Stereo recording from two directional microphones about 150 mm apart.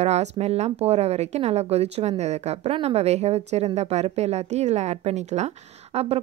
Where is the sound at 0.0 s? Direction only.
45° right (ahead or behind).